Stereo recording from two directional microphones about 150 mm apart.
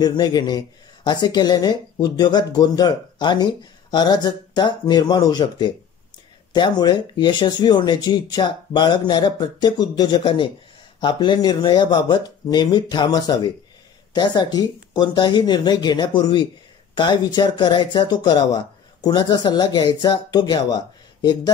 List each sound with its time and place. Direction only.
0.0 s speech: 25° left (ahead or behind)